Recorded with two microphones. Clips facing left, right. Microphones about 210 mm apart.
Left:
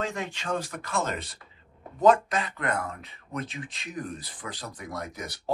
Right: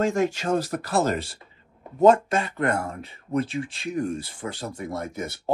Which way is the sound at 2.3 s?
30° right (ahead or behind).